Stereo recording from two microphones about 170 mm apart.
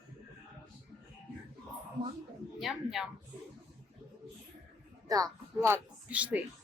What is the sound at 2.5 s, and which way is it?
Speech, centre (ahead or behind).